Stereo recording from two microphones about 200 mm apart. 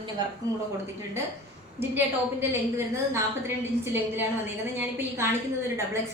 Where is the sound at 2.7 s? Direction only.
10° right (ahead or behind).